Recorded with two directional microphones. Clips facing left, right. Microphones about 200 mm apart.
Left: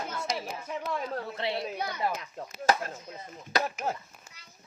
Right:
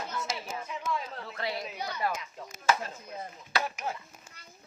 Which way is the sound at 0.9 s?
50° left (ahead or behind).